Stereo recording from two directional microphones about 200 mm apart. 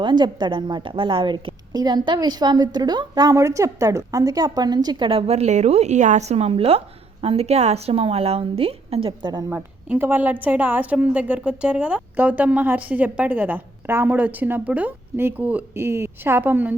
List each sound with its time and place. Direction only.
0.0 s a woman's voice: 20° right (ahead or behind)
9.5 s a woman's voice: 10° right (ahead or behind)